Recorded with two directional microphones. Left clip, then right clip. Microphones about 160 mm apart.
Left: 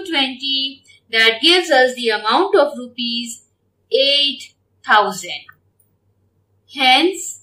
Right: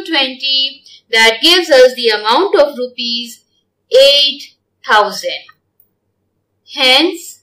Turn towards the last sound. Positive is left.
turn(degrees=-15)  # may be behind; listen again after turning